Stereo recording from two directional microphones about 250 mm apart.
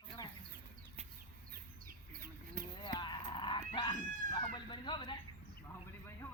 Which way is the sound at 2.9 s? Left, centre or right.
Centre.